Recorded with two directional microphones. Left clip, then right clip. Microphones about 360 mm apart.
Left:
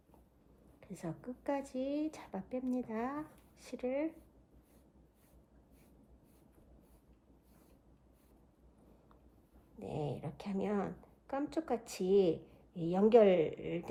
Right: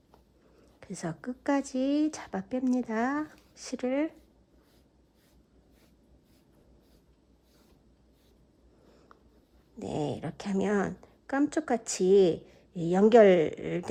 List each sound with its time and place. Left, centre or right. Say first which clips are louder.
0.8 s a woman's voice: right 7 dB; right
9.7 s speech: right 8 dB; right